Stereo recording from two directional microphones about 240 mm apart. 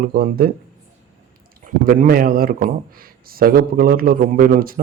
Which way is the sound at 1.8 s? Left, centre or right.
Right.